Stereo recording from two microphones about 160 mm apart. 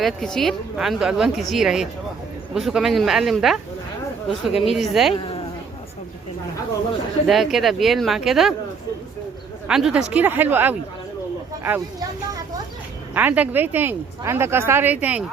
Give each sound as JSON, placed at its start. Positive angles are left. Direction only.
{"t": 0.0, "sound": "a woman's voice", "side_deg": 5}
{"t": 5.1, "sound": "speech", "side_deg": 35}
{"t": 7.3, "sound": "a woman's voice", "side_deg": 0}
{"t": 9.6, "sound": "speech", "side_deg": -5}
{"t": 13.1, "sound": "speech", "side_deg": -10}